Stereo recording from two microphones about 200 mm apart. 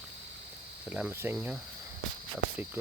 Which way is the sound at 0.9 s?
10° right (ahead or behind).